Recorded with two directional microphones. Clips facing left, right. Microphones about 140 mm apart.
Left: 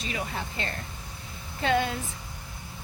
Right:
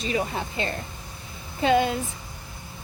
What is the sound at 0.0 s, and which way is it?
A woman's voice, 20° right (ahead or behind).